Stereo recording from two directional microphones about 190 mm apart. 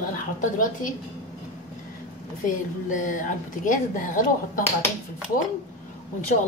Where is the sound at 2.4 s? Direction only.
45° left (ahead or behind).